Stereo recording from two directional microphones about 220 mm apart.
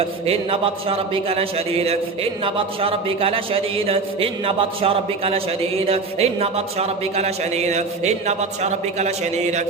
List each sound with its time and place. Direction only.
0.0 s a man's voice: 25° right (ahead or behind)